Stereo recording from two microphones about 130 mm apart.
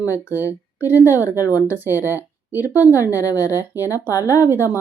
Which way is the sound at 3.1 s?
25° left (ahead or behind).